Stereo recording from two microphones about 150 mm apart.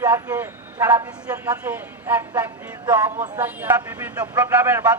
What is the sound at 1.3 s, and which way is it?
Speech, 10° right (ahead or behind).